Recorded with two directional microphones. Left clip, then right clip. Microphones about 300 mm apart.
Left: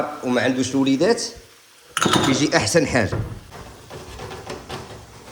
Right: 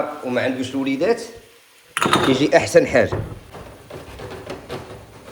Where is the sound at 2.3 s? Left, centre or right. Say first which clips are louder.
Right 4 dB; centre.